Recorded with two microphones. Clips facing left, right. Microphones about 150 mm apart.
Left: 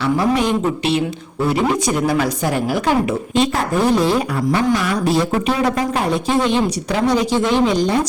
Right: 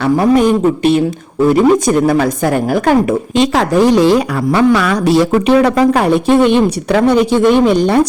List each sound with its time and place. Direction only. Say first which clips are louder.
0.2 s speech: right 7 dB; 50° right (ahead or behind)
3.3 s a woman's voice: right 6 dB; 90° right; by 8.0 s 60° right (ahead or behind)